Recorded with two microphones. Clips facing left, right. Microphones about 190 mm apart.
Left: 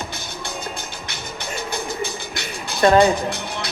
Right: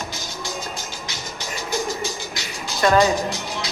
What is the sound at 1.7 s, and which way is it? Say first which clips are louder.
Music: right 4 dB; 60° left (ahead or behind).